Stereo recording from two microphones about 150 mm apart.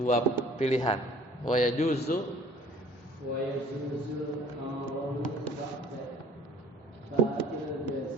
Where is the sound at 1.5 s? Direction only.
55° left (ahead or behind).